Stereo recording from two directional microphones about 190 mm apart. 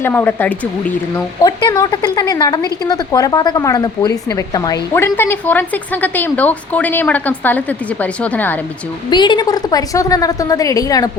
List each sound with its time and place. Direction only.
0.0 s speech: 10° left (ahead or behind)
1.4 s a woman's voice: 20° left (ahead or behind)
9.0 s a woman's voice: 25° left (ahead or behind)